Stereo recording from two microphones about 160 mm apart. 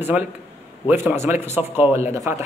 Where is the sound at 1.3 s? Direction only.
15° right (ahead or behind).